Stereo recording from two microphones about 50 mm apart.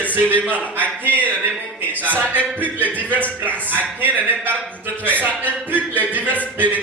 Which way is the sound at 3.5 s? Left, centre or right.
Right.